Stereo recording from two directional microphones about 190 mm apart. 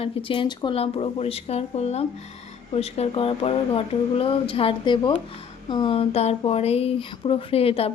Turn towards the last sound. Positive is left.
turn(degrees=30)  # may be behind; listen again after turning